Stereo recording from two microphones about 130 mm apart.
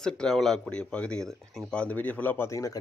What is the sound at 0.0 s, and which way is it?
Speech, 5° left (ahead or behind).